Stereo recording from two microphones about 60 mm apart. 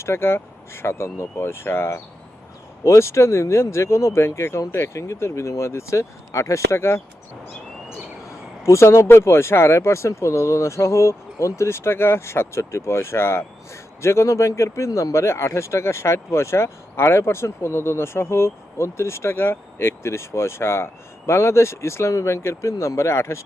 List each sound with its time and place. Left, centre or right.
0.0 s speech: left
2.8 s speech: left
8.6 s speech: left